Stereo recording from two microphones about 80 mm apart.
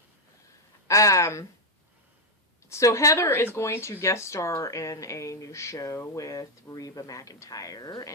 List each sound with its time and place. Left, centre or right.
0.9 s speech: left
2.6 s speech: left